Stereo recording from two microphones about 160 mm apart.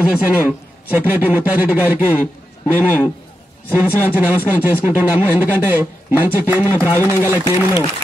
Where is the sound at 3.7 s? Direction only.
10° right (ahead or behind).